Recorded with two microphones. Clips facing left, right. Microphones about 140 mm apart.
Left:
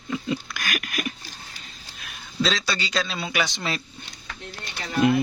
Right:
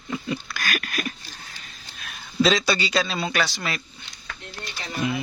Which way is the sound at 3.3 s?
15° left (ahead or behind).